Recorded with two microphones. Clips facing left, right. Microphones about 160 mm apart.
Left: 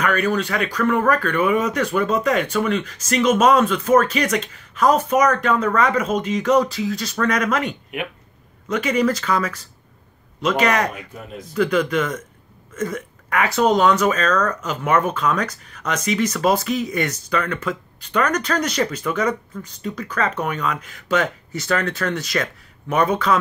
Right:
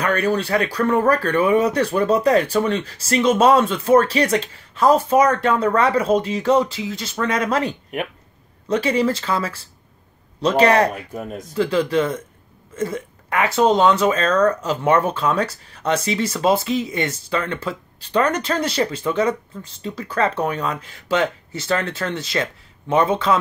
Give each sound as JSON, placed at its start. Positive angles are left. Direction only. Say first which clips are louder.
{"t": 0.0, "sound": "speech", "louder": "even", "side_deg": -35}